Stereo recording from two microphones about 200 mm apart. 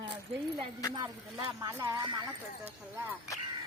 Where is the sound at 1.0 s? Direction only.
20° right (ahead or behind).